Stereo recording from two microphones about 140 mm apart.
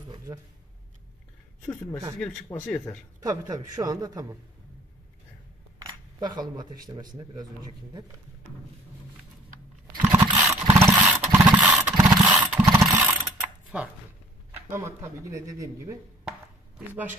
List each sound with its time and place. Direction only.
1.7 s speech: 20° left (ahead or behind)
3.2 s speech: 25° right (ahead or behind)
6.1 s speech: 30° right (ahead or behind)
10.0 s vehicle: 15° right (ahead or behind)
11.4 s vehicle: centre (ahead or behind)
11.8 s vehicle: 15° right (ahead or behind)
14.7 s speech: 20° right (ahead or behind)
16.3 s chopping: 10° right (ahead or behind)